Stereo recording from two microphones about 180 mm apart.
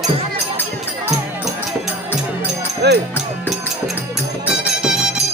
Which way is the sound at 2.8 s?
70° right (ahead or behind).